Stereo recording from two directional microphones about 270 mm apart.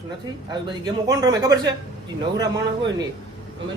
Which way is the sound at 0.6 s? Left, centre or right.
Centre.